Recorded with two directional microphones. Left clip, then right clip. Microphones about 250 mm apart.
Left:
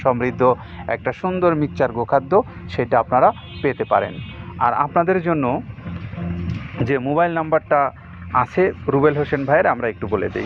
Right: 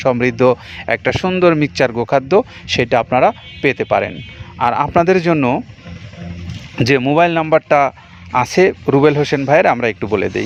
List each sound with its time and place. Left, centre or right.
0.1 s speech: right
0.4 s speech: right
6.7 s speech: right